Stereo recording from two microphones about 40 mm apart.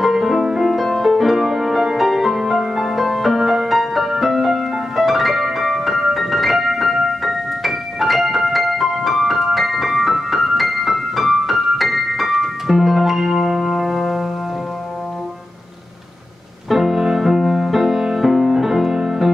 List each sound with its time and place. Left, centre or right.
0.0 s music: centre
0.7 s music: centre
16.6 s music: centre